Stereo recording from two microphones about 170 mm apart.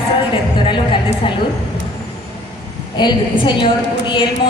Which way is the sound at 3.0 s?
25° left (ahead or behind).